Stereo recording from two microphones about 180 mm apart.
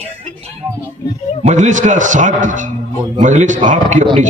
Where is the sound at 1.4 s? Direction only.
40° right (ahead or behind).